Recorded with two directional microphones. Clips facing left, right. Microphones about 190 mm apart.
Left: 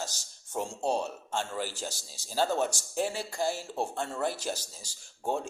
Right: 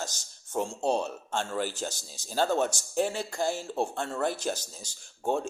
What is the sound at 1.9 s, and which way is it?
Speech, 10° left (ahead or behind).